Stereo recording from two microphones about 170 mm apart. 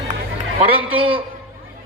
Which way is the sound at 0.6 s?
30° right (ahead or behind).